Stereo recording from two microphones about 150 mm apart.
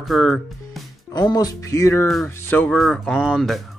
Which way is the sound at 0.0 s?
Centre (ahead or behind).